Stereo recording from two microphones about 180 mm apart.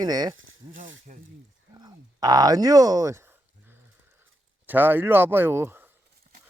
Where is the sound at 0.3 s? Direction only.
90° right.